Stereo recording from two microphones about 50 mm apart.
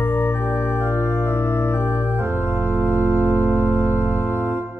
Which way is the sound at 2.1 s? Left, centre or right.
Right.